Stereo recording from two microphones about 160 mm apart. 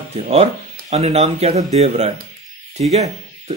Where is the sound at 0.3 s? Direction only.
40° right (ahead or behind).